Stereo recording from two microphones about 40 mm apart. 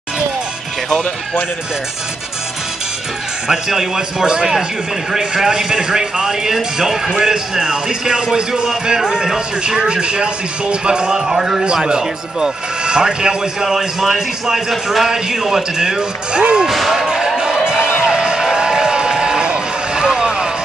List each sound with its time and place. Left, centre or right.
3.4 s speech: centre
9.8 s speech: right
16.6 s a sound: centre
17.4 s music: right